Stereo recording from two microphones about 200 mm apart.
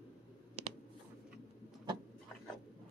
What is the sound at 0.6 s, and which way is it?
Clicking, 30° right (ahead or behind).